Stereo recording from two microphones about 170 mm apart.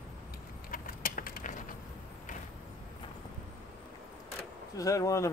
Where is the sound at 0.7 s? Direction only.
55° left (ahead or behind).